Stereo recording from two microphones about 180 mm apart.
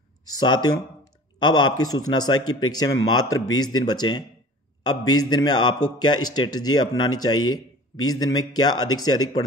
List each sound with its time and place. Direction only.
0.3 s speech: 25° left (ahead or behind)